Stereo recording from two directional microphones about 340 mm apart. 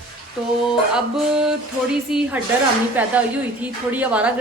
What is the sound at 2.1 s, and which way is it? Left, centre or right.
Speech, centre.